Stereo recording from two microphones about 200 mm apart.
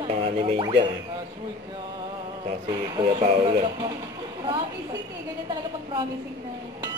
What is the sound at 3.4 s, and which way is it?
Speech, 25° right (ahead or behind).